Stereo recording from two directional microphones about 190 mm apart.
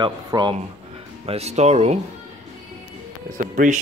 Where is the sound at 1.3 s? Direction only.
35° right (ahead or behind).